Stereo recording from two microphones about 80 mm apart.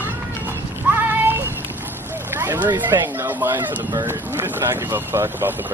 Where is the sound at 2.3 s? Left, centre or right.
Right.